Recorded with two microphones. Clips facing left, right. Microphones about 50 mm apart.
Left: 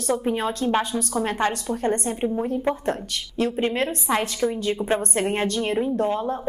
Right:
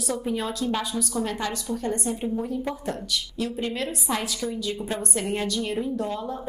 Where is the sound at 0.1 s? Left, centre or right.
Left.